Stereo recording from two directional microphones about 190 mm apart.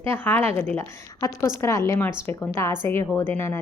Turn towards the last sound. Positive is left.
turn(degrees=10)  # may be behind; listen again after turning